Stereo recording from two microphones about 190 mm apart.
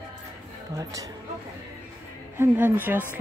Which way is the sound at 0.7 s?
15° right (ahead or behind).